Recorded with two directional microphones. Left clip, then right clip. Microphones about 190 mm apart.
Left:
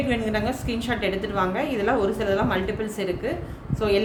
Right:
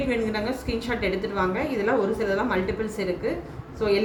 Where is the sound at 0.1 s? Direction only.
30° left (ahead or behind).